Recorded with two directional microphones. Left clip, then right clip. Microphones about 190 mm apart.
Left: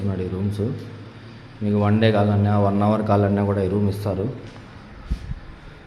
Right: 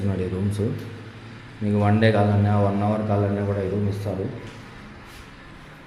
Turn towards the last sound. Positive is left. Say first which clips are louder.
# left 3 dB
turn(degrees=30)  # may be behind; listen again after turning